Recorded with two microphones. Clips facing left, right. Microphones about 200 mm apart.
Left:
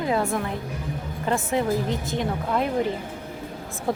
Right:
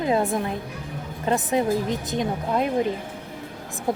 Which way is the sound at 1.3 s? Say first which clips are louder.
Right 2 dB; 20° right (ahead or behind).